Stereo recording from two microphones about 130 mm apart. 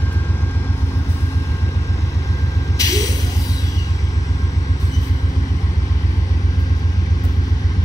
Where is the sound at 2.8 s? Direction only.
25° left (ahead or behind).